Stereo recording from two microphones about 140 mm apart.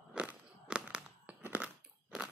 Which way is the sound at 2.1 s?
5° right (ahead or behind).